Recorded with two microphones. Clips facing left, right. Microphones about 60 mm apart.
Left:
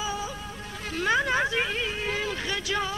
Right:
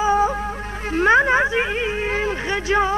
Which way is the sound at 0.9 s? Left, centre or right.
Right.